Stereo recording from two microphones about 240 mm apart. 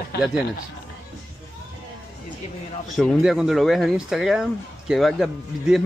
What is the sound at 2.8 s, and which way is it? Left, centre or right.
Speech, centre.